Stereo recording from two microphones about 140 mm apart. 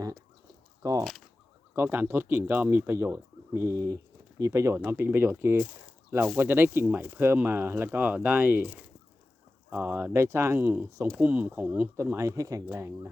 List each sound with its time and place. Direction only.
0.8 s speech: 25° right (ahead or behind)